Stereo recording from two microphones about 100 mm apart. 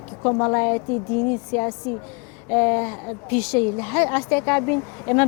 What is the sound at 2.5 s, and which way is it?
A woman's voice, 20° left (ahead or behind).